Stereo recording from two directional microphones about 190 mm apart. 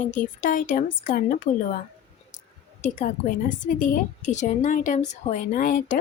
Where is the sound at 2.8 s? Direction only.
45° left (ahead or behind).